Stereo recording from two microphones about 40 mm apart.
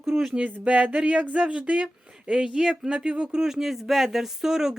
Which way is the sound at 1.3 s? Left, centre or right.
Right.